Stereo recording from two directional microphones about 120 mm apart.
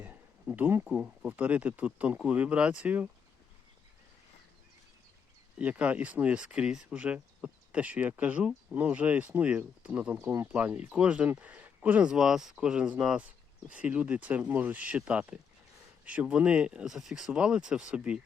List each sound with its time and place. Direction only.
0.0 s a sound: 15° right (ahead or behind)
0.9 s speech: 10° right (ahead or behind)
5.5 s speech: 10° right (ahead or behind)